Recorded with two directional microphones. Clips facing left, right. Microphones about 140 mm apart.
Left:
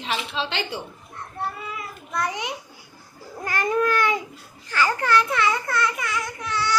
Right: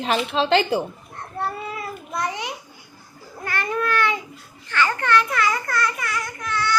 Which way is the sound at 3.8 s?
15° left (ahead or behind).